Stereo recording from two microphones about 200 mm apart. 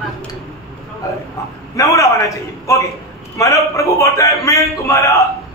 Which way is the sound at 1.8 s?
15° left (ahead or behind).